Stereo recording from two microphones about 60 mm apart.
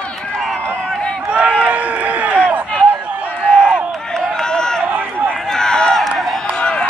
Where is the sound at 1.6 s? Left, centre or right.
Right.